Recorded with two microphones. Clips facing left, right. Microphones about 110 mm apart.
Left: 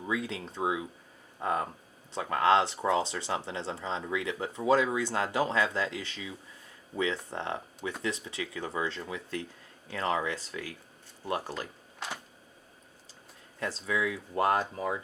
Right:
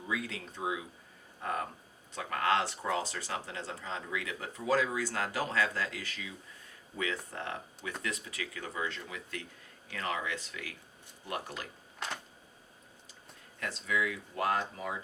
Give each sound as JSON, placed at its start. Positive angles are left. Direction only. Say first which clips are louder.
{"t": 0.1, "sound": "speech", "louder": "left 4 dB", "side_deg": 25}
{"t": 2.1, "sound": "speech", "louder": "left 6 dB", "side_deg": 30}
{"t": 11.9, "sound": "a sound", "louder": "left 1 dB", "side_deg": 5}
{"t": 13.6, "sound": "speech", "louder": "left 2 dB", "side_deg": 30}